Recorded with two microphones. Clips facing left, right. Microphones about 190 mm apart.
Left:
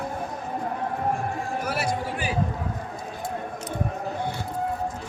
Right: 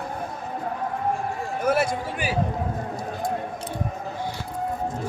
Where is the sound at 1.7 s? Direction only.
50° right (ahead or behind).